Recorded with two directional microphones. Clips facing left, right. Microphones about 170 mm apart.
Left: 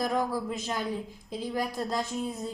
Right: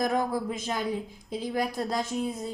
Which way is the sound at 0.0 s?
15° right (ahead or behind).